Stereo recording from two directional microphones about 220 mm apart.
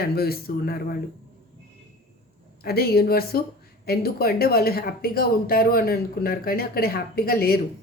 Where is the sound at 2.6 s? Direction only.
45° left (ahead or behind).